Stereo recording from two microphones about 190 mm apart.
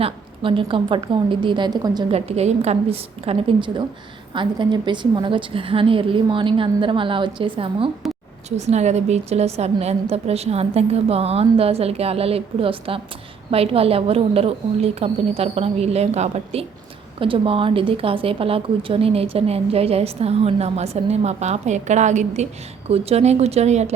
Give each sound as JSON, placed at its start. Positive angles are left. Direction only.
{"t": 0.0, "sound": "a woman's voice", "side_deg": -25}